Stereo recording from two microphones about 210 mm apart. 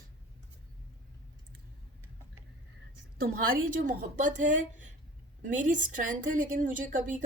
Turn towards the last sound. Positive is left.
turn(degrees=-40)  # may be behind; listen again after turning